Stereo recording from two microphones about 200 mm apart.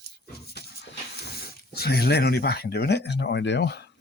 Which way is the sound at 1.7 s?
50° left (ahead or behind).